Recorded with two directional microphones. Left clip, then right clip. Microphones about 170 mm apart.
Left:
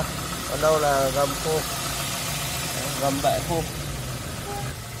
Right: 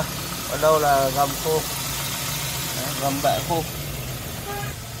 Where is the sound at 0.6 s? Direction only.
20° right (ahead or behind).